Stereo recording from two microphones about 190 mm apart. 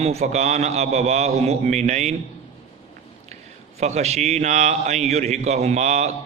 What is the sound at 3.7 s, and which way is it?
A man's voice, 35° right (ahead or behind).